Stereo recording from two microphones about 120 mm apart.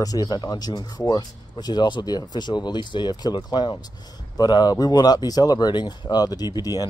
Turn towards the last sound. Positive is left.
turn(degrees=35)  # may be behind; listen again after turning